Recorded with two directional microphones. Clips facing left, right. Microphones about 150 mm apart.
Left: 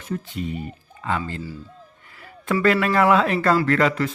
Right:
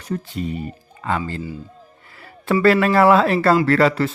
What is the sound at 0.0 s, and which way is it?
A man's voice, 40° right (ahead or behind).